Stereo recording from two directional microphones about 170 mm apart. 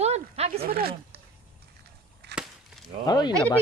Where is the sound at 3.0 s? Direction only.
25° left (ahead or behind).